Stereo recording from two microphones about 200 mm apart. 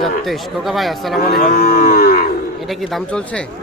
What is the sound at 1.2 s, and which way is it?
Livestock, 45° left (ahead or behind).